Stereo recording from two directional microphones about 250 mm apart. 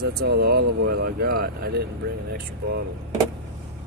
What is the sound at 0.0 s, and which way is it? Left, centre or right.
Speech, right.